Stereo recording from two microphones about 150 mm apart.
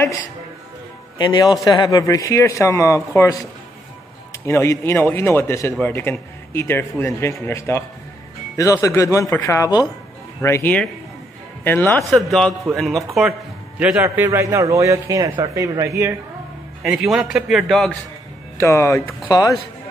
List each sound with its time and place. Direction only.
1.1 s a man's voice: 30° left (ahead or behind)
4.5 s a man's voice: 15° left (ahead or behind)
12.1 s a man's voice: centre (ahead or behind); by 16.2 s 20° right (ahead or behind)
16.8 s a man's voice: 5° right (ahead or behind)
18.6 s a man's voice: 20° left (ahead or behind)